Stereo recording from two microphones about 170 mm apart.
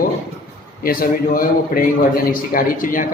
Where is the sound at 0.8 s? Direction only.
60° left (ahead or behind).